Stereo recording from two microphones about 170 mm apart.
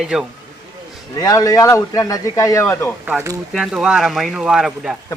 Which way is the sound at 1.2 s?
20° left (ahead or behind).